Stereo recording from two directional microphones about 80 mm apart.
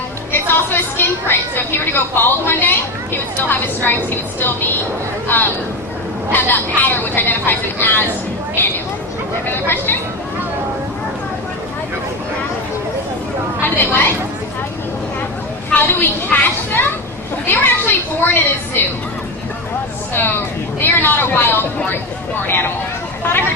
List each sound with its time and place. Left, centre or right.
0.3 s a woman's voice: left
9.5 s a woman's voice: left
13.6 s speech: left
15.7 s a woman's voice: left
20.8 s a woman's voice: left